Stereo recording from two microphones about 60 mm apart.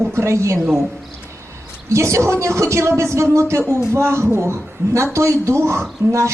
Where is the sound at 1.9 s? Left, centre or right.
Right.